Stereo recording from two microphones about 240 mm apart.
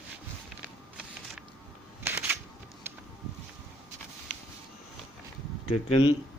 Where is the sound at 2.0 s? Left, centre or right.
Centre.